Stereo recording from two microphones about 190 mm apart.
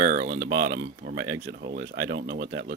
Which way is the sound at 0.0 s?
45° right (ahead or behind).